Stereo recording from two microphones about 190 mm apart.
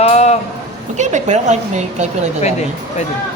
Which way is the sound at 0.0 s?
35° left (ahead or behind).